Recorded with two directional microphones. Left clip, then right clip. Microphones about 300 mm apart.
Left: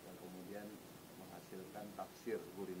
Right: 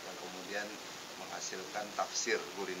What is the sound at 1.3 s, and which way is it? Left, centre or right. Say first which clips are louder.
Speech: right 11 dB; centre.